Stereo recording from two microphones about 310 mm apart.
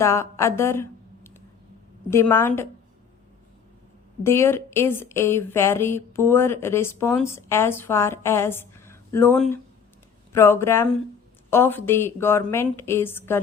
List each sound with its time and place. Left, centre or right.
0.0 s a woman's voice: centre
4.2 s a woman's voice: centre